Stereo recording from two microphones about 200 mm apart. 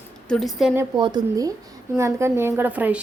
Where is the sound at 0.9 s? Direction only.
20° right (ahead or behind).